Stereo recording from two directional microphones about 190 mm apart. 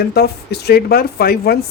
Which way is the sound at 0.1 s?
60° left (ahead or behind).